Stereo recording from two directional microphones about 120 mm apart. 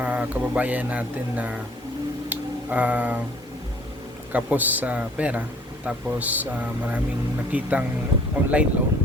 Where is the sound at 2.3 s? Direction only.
15° right (ahead or behind).